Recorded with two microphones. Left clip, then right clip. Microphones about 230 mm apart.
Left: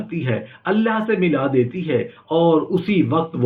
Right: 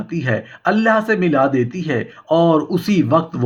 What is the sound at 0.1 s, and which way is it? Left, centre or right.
Speech, right.